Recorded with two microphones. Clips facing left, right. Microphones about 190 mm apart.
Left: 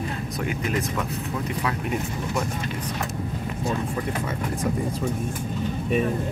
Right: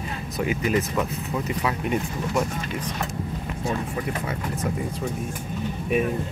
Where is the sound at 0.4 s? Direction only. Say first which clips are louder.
Right 4 dB; 10° right (ahead or behind).